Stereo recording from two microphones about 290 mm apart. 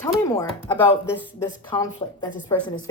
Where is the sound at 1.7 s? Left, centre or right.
Centre.